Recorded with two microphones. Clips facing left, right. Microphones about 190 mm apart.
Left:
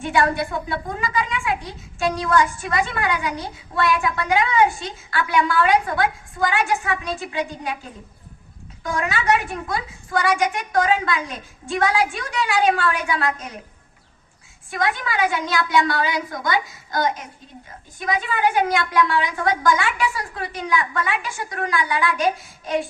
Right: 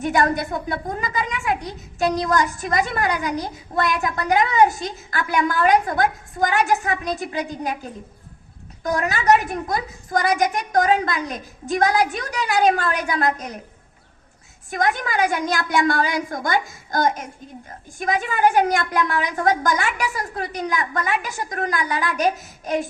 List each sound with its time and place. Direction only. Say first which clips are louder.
0.0 s a child's voice: even; 40° right (ahead or behind)
8.8 s a child's voice: right 2 dB; 40° right (ahead or behind)
14.7 s a woman's voice: right 2 dB; 45° right (ahead or behind)